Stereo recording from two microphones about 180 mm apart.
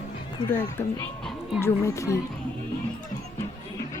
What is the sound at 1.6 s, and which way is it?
Speech, 15° left (ahead or behind).